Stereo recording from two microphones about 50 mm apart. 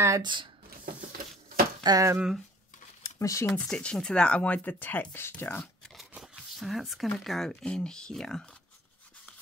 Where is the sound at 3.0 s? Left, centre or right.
Left.